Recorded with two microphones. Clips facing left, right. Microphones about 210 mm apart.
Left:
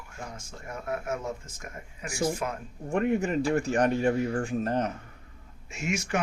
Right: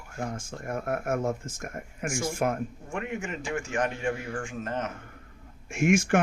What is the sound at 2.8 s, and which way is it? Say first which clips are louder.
A man's voice: left 12 dB; 35° left (ahead or behind).